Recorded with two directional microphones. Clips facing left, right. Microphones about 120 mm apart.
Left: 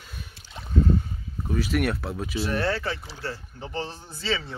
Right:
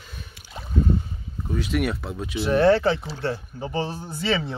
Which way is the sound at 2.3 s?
20° right (ahead or behind).